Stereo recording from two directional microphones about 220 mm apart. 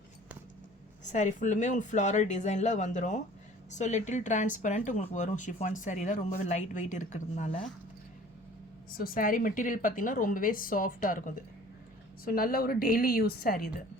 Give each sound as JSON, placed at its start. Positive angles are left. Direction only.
{"t": 1.1, "sound": "speech", "side_deg": 35}
{"t": 8.9, "sound": "speech", "side_deg": 40}